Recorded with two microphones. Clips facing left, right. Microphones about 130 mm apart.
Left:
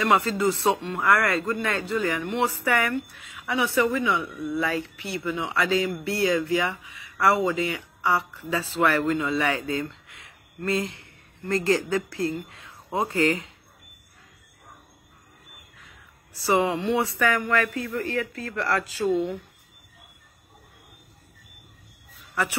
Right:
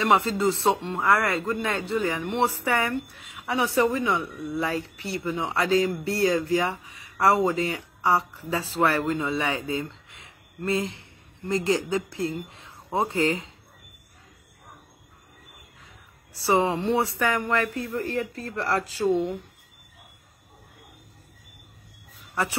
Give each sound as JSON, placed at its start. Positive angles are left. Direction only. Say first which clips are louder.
{"t": 0.0, "sound": "speech", "louder": "even", "side_deg": -25}
{"t": 9.0, "sound": "speech", "louder": "left 2 dB", "side_deg": -20}
{"t": 16.4, "sound": "speech", "louder": "even", "side_deg": -30}